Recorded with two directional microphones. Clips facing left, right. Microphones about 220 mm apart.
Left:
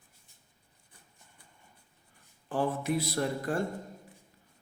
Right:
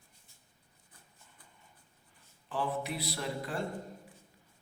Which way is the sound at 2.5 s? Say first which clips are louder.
Left 5 dB; 45° left (ahead or behind).